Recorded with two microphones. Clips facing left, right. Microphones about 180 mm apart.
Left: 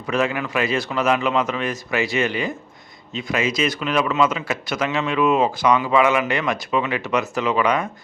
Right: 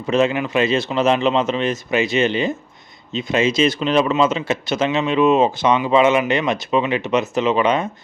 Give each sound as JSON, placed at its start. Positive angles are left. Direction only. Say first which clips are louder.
{"t": 0.1, "sound": "speech", "louder": "right 4 dB", "side_deg": -25}